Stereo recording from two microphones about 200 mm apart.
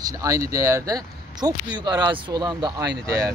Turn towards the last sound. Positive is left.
turn(degrees=-15)  # may be behind; listen again after turning